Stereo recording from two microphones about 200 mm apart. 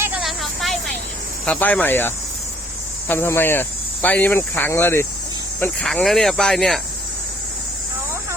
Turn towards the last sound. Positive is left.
turn(degrees=0)  # may be behind; listen again after turning